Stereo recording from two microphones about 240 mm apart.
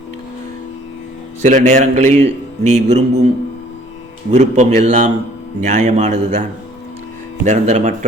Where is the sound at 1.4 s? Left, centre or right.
Right.